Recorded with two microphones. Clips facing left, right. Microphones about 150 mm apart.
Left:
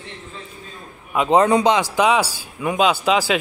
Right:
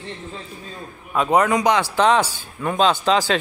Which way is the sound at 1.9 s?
10° left (ahead or behind).